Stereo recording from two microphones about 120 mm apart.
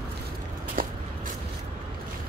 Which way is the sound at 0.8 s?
90° right.